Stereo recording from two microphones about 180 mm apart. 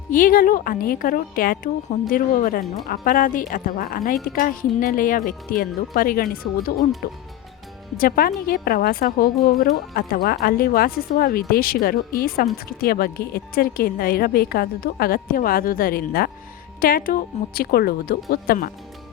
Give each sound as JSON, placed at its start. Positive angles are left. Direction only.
{"t": 0.1, "sound": "a woman's voice", "side_deg": 50}
{"t": 7.9, "sound": "a woman's voice", "side_deg": 55}